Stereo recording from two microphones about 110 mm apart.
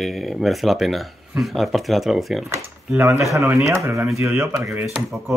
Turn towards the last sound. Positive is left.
turn(degrees=0)  # may be behind; listen again after turning